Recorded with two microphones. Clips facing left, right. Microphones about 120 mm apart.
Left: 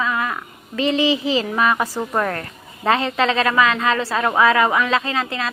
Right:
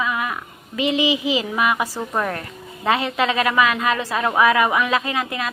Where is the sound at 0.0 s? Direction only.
15° right (ahead or behind).